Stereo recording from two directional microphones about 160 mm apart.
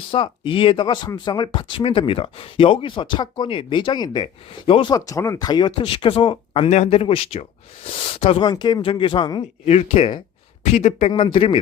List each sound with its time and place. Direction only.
0.1 s speech: 35° left (ahead or behind)
11.1 s speech: 30° left (ahead or behind)